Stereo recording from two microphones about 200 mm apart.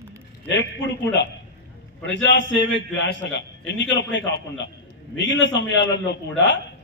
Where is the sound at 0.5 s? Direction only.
65° left (ahead or behind).